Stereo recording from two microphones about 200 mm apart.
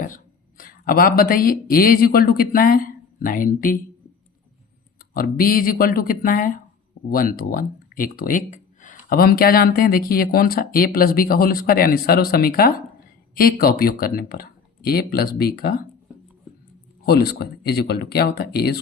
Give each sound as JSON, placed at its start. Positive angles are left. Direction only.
{"t": 0.0, "sound": "speech", "side_deg": 45}
{"t": 5.1, "sound": "speech", "side_deg": 45}
{"t": 17.1, "sound": "speech", "side_deg": 50}